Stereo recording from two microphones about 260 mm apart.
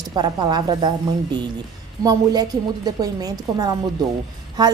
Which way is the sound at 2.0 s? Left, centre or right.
Centre.